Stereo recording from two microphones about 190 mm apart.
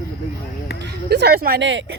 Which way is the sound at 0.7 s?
60° left (ahead or behind).